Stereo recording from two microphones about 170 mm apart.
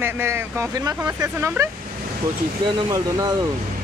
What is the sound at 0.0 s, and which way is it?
Speech, 15° right (ahead or behind).